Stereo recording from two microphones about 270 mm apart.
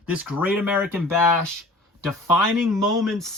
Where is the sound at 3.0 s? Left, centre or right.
Centre.